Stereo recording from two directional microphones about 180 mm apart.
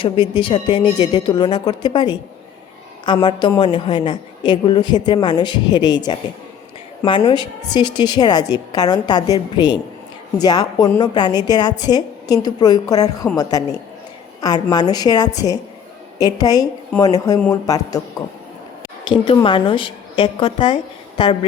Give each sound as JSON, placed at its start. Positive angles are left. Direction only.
{"t": 0.0, "sound": "a woman's voice", "side_deg": 30}
{"t": 19.0, "sound": "a woman's voice", "side_deg": 25}